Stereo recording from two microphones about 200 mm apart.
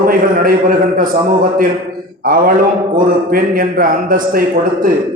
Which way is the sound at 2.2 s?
45° right (ahead or behind).